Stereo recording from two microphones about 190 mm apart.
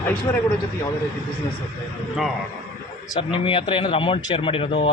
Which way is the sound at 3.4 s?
25° left (ahead or behind).